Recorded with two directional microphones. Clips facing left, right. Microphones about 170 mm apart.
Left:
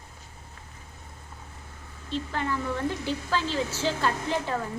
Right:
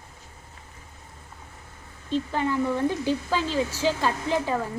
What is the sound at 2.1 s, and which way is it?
A woman's voice, 15° right (ahead or behind).